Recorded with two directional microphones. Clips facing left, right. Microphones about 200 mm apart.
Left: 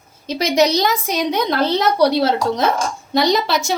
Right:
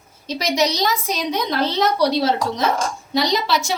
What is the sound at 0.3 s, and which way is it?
A woman's voice, 55° left (ahead or behind).